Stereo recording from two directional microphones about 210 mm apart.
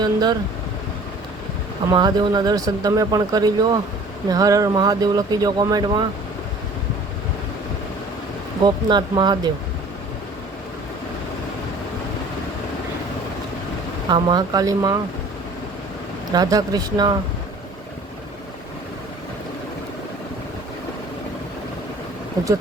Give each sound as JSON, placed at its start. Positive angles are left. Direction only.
{"t": 0.0, "sound": "speech", "side_deg": -20}
{"t": 1.9, "sound": "speech", "side_deg": -20}
{"t": 8.6, "sound": "speech", "side_deg": -20}
{"t": 14.1, "sound": "speech", "side_deg": -20}
{"t": 16.3, "sound": "speech", "side_deg": -15}
{"t": 22.4, "sound": "speech", "side_deg": -15}